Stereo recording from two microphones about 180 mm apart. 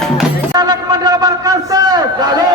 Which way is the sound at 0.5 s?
20° right (ahead or behind).